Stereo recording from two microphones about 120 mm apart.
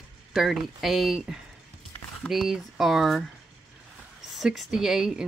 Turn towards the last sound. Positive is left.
turn(degrees=-5)  # may be behind; listen again after turning